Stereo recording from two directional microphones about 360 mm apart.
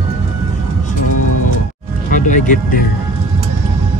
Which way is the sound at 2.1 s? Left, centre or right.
Left.